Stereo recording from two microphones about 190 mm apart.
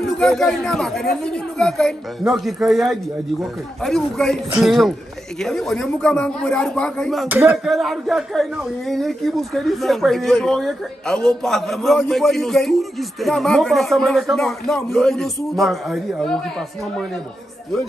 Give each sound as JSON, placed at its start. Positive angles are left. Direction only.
{"t": 0.2, "sound": "speech", "side_deg": 0}
{"t": 7.2, "sound": "speech", "side_deg": -10}